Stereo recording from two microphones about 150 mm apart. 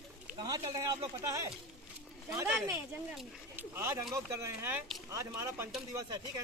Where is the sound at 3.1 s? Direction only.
5° right (ahead or behind).